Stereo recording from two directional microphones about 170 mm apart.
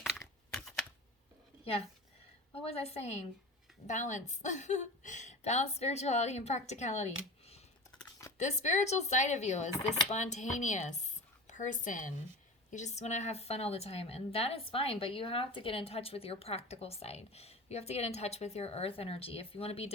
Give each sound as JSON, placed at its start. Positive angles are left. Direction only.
{"t": 0.0, "sound": "typing", "side_deg": 0}
{"t": 2.6, "sound": "a woman's voice", "side_deg": 35}
{"t": 8.4, "sound": "a woman's voice", "side_deg": 45}